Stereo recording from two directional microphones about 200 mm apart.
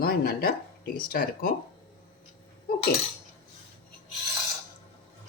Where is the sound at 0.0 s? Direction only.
50° left (ahead or behind).